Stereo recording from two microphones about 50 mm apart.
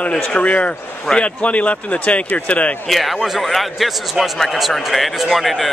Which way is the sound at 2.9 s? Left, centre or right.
Centre.